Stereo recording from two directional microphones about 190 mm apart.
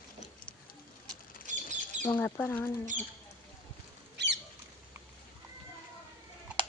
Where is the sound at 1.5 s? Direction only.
40° right (ahead or behind).